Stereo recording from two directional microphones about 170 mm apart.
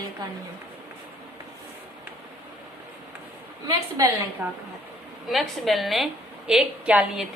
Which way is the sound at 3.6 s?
20° right (ahead or behind).